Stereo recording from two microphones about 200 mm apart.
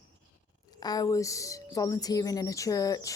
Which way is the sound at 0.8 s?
20° left (ahead or behind).